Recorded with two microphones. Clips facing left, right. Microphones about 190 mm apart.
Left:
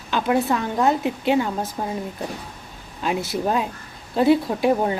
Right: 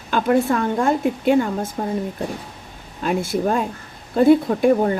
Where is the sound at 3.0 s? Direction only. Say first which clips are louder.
Right 3 dB; 50° right (ahead or behind).